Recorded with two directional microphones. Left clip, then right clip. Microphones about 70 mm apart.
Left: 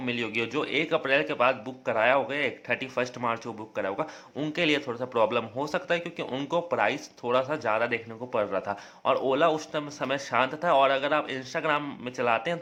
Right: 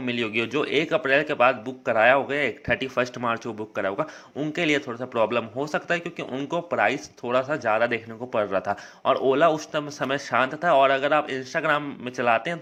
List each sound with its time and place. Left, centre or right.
0.0 s a man's voice: right
4.5 s speech: centre
6.7 s a man's voice: right
7.8 s a man's voice: right